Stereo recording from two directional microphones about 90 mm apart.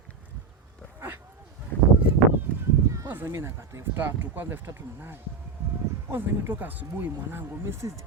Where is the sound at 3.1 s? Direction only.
25° right (ahead or behind).